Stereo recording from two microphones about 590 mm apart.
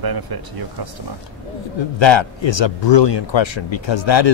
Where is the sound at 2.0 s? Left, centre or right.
Left.